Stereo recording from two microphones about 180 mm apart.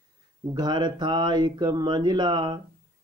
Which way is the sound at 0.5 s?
25° right (ahead or behind).